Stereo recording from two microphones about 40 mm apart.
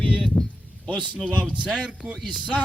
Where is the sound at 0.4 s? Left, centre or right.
Right.